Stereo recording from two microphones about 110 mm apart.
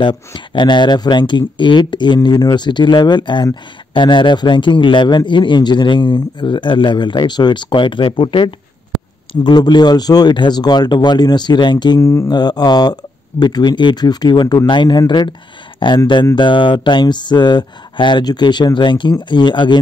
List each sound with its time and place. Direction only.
0.0 s a man's voice: 45° left (ahead or behind)
12.0 s speech: 30° left (ahead or behind)
12.3 s speech: 40° left (ahead or behind)
16.3 s a man's voice: 45° left (ahead or behind)